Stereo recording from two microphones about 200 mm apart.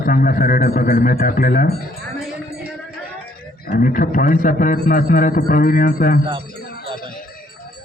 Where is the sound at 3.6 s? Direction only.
45° left (ahead or behind).